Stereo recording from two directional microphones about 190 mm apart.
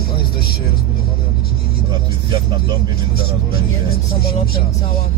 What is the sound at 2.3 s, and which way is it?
Vehicle, 25° right (ahead or behind).